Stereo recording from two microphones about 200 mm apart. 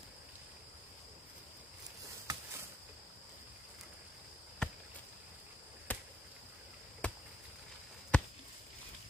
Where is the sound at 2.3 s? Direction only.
20° right (ahead or behind).